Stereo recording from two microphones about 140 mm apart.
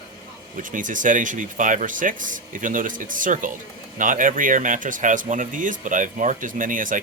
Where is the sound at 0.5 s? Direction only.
70° right (ahead or behind).